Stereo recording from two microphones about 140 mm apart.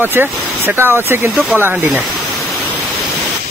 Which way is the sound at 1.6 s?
15° right (ahead or behind).